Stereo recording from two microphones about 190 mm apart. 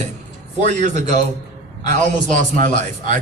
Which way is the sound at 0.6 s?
40° right (ahead or behind).